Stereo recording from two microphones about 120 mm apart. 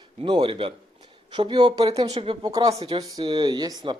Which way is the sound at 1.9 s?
50° right (ahead or behind).